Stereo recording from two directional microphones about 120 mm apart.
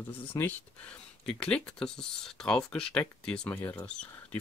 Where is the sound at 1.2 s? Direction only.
10° left (ahead or behind).